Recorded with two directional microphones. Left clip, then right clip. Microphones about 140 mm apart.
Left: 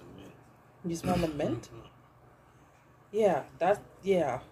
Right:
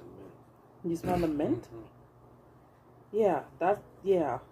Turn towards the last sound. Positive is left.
turn(degrees=-10)  # may be behind; listen again after turning